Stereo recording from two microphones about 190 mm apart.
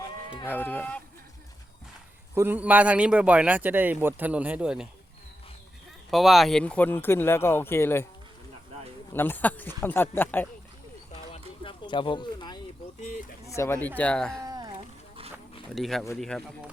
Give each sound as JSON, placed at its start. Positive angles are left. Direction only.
{"t": 0.4, "sound": "speech", "side_deg": 10}
{"t": 2.3, "sound": "a man's voice", "side_deg": -10}
{"t": 6.1, "sound": "speech", "side_deg": 0}
{"t": 9.1, "sound": "speech", "side_deg": 10}
{"t": 11.3, "sound": "a sound", "side_deg": 25}
{"t": 13.0, "sound": "a sound", "side_deg": 40}
{"t": 13.6, "sound": "speech", "side_deg": 10}
{"t": 14.4, "sound": "music", "side_deg": -20}
{"t": 15.7, "sound": "a man's voice", "side_deg": 0}